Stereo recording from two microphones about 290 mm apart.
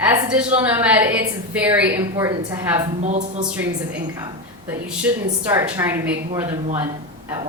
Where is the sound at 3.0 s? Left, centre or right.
Right.